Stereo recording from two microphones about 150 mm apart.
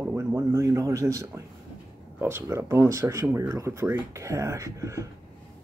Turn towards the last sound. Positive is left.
turn(degrees=-20)  # may be behind; listen again after turning